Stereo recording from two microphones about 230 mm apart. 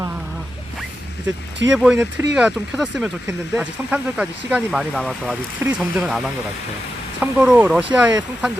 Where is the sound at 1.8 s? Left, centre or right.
Centre.